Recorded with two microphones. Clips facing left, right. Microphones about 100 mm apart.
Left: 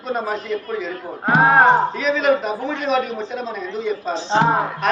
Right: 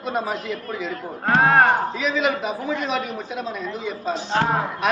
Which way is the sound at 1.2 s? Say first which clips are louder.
Left 2 dB; 15° left (ahead or behind).